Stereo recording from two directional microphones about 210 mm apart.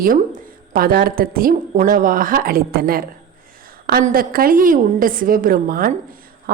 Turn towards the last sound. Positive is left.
turn(degrees=-40)  # may be behind; listen again after turning